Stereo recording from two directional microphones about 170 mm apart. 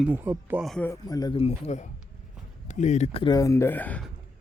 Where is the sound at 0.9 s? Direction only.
20° left (ahead or behind); by 3.2 s 40° left (ahead or behind).